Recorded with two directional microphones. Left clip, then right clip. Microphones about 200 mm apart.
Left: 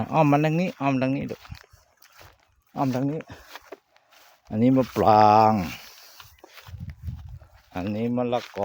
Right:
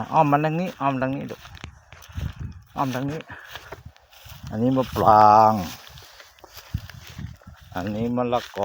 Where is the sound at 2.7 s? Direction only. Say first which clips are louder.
Even; 35° left (ahead or behind).